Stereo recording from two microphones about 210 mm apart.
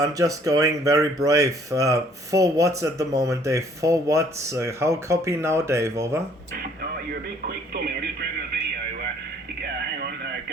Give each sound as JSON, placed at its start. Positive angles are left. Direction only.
{"t": 0.0, "sound": "speech", "side_deg": -15}
{"t": 6.6, "sound": "radio", "side_deg": -45}